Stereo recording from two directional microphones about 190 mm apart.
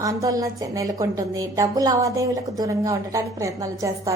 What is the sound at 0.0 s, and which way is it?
A woman's voice, 15° right (ahead or behind).